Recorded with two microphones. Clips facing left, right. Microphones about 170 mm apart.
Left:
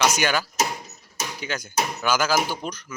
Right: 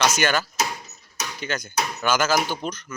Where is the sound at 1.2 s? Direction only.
10° left (ahead or behind).